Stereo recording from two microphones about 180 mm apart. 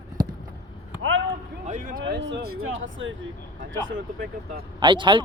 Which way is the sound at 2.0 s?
75° right (ahead or behind).